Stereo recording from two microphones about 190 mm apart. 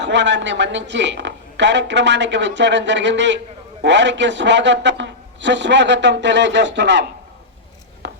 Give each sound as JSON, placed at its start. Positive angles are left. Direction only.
{"t": 0.0, "sound": "a woman's voice", "side_deg": -70}
{"t": 8.0, "sound": "chopping", "side_deg": -65}